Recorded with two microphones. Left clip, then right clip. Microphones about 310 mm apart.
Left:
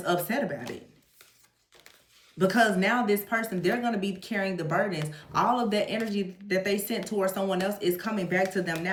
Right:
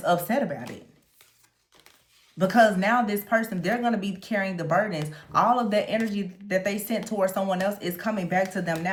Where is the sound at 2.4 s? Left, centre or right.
Right.